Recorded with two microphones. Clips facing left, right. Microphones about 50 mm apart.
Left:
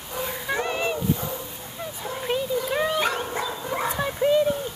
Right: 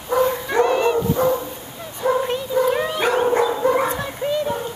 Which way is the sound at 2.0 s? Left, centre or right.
Right.